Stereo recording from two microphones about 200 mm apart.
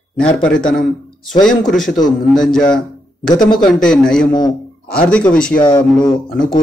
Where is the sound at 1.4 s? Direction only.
Centre (ahead or behind).